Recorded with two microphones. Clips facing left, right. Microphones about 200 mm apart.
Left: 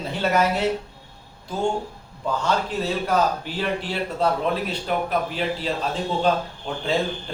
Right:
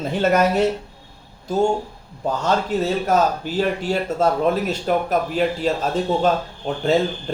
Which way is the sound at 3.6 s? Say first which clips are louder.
Right 7 dB; 45° right (ahead or behind).